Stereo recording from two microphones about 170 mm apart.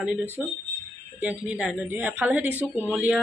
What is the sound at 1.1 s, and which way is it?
Speech, 10° right (ahead or behind).